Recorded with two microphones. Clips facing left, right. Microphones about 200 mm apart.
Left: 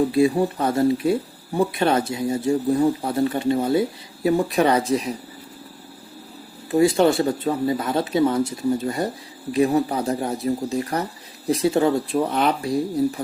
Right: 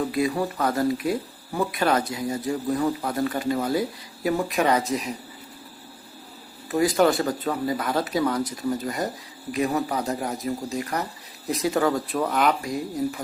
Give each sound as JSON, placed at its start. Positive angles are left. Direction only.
{"t": 0.1, "sound": "speech", "side_deg": 25}
{"t": 6.7, "sound": "speech", "side_deg": 25}